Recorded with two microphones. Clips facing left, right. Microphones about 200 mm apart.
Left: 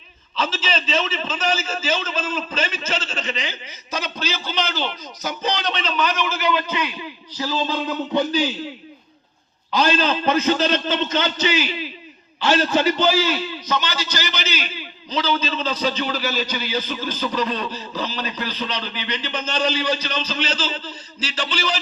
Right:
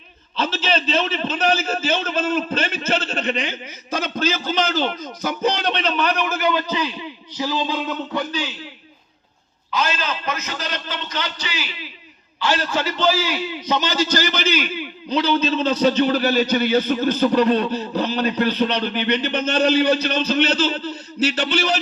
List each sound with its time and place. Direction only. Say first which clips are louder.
0.4 s a man's voice: right 4 dB; 55° right (ahead or behind)
6.5 s speech: right 1 dB; 35° right (ahead or behind); by 7.8 s 15° right (ahead or behind)
8.3 s a man's voice: left 6 dB; 35° left (ahead or behind)
9.7 s a man's voice: left 5 dB; 35° left (ahead or behind)
13.0 s a man's voice: left 1 dB; 5° right (ahead or behind)
13.7 s a man's voice: right 6 dB; 35° right (ahead or behind); by 21.8 s 60° right (ahead or behind)